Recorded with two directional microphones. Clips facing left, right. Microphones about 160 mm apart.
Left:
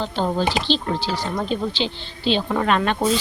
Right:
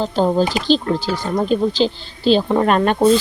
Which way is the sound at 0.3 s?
45° right (ahead or behind).